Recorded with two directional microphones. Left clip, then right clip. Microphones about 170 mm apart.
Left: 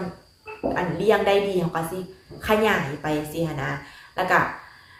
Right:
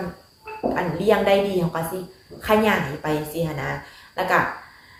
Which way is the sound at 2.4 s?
15° left (ahead or behind).